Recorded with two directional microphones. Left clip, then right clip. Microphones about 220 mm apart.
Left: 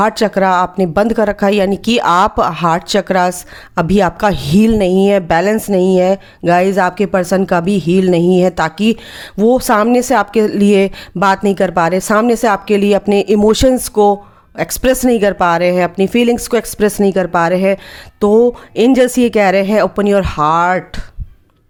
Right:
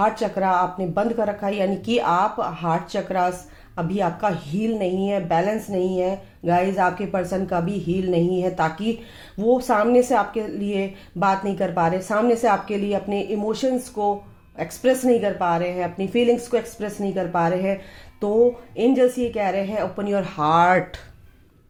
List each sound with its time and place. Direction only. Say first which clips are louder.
0.0 s a woman's voice: left 9 dB; 45° left (ahead or behind); by 21.0 s 25° left (ahead or behind)